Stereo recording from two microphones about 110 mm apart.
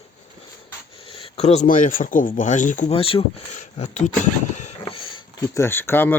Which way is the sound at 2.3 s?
90° left.